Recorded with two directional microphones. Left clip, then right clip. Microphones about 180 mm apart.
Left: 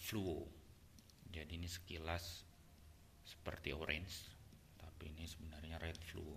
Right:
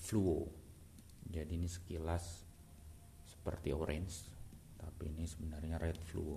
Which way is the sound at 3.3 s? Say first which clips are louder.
Right 4 dB; 25° right (ahead or behind).